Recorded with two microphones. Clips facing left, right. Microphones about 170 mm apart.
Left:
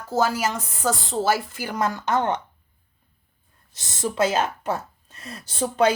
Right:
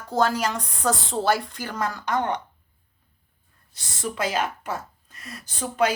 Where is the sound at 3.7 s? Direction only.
25° left (ahead or behind).